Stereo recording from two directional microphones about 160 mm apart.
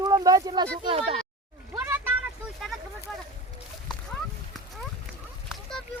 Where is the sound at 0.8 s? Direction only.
35° right (ahead or behind).